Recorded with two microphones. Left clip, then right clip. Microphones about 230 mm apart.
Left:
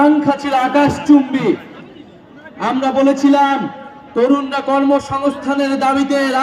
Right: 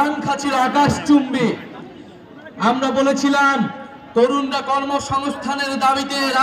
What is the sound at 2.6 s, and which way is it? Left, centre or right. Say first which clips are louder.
A man's voice: left 2 dB; right.